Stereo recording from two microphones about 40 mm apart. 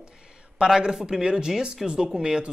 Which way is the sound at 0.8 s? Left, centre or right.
Centre.